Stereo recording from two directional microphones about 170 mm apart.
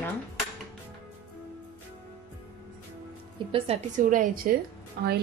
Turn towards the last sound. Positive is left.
turn(degrees=-70)  # may be behind; listen again after turning